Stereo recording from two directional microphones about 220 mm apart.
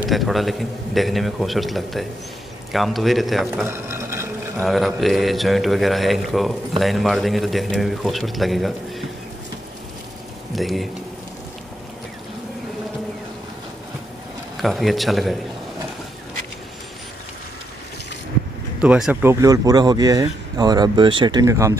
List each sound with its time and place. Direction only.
0.0 s speech: centre (ahead or behind)
3.6 s a sound: 10° right (ahead or behind)
4.6 s speech: centre (ahead or behind)
10.5 s a man's voice: centre (ahead or behind)
14.6 s speech: centre (ahead or behind)
18.8 s speech: 5° right (ahead or behind)
19.4 s speech: 15° right (ahead or behind)